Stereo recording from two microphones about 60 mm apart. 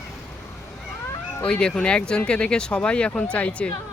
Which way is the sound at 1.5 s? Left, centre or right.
Centre.